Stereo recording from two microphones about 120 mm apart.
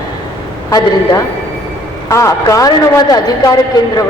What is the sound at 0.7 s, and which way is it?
A woman's voice, 35° left (ahead or behind).